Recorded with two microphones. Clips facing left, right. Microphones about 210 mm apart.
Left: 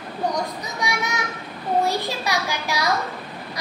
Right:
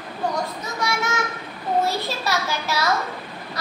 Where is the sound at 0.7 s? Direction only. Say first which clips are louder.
Right 2 dB; 15° left (ahead or behind).